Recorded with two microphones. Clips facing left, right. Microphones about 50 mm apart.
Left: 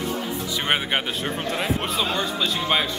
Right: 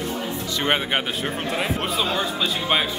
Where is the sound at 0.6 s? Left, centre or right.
Centre.